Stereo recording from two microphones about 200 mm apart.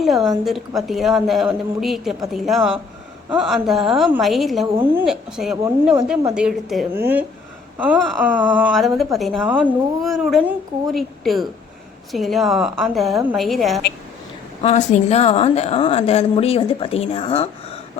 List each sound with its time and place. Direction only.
0.0 s a woman's voice: centre (ahead or behind)
14.6 s a woman's voice: 35° left (ahead or behind)